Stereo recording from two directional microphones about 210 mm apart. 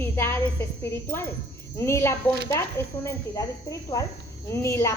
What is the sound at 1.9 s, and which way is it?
A woman's voice, 15° left (ahead or behind).